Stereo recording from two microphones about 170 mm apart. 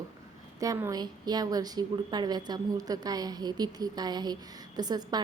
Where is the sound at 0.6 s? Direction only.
20° right (ahead or behind).